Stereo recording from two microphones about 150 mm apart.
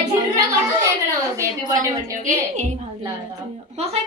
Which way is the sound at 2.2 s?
50° right (ahead or behind).